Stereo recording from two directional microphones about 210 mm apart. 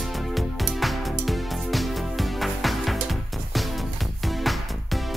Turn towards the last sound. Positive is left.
turn(degrees=0)  # may be behind; listen again after turning